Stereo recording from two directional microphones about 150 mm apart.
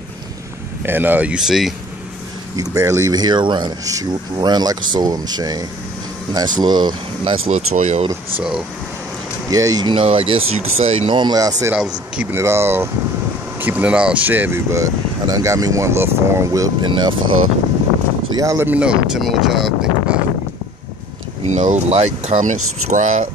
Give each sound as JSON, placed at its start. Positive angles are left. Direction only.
{"t": 0.8, "sound": "speech", "side_deg": -15}
{"t": 2.5, "sound": "speech", "side_deg": -20}
{"t": 7.5, "sound": "speech", "side_deg": -55}
{"t": 9.5, "sound": "speech", "side_deg": -25}
{"t": 11.1, "sound": "speech", "side_deg": -25}
{"t": 12.2, "sound": "speech", "side_deg": -15}
{"t": 16.9, "sound": "speech", "side_deg": -35}
{"t": 18.3, "sound": "speech", "side_deg": -25}
{"t": 18.7, "sound": "speech", "side_deg": -5}
{"t": 21.5, "sound": "speech", "side_deg": -50}